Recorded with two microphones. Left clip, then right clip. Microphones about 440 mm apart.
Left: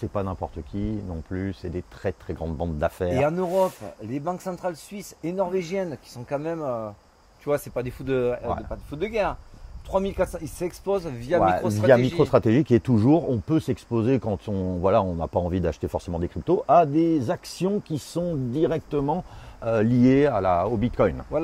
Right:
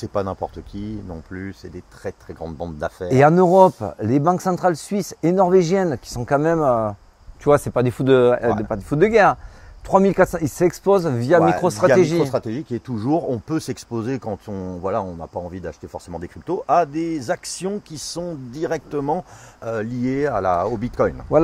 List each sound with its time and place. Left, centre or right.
0.0 s speech: centre
2.4 s speech: centre
3.2 s speech: right
8.6 s speech: right
12.3 s speech: left
12.9 s speech: centre
20.3 s speech: centre